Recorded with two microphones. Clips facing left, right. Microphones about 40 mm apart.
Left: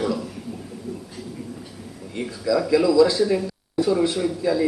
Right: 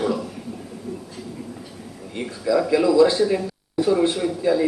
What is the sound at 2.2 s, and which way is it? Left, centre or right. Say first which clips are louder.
A man's voice: right 1 dB; centre.